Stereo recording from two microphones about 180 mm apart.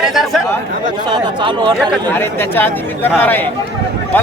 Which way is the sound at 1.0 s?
25° right (ahead or behind).